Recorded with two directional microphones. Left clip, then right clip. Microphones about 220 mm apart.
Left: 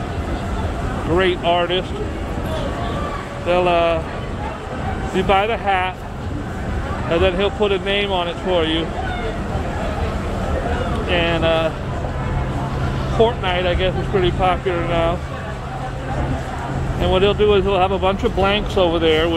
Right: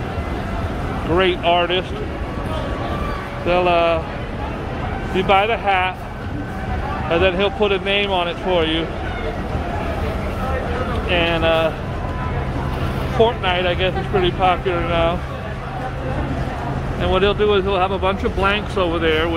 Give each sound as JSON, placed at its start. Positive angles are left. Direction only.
{"t": 1.1, "sound": "speech", "side_deg": 0}
{"t": 3.4, "sound": "speech", "side_deg": 0}
{"t": 5.1, "sound": "speech", "side_deg": 0}
{"t": 7.1, "sound": "speech", "side_deg": 0}
{"t": 11.1, "sound": "speech", "side_deg": 0}
{"t": 13.2, "sound": "speech", "side_deg": 0}
{"t": 17.0, "sound": "speech", "side_deg": 5}